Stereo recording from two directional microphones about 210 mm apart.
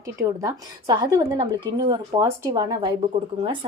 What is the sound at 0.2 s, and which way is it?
Speech, 15° right (ahead or behind).